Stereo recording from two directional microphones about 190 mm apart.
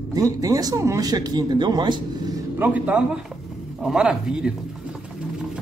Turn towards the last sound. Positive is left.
turn(degrees=-5)  # may be behind; listen again after turning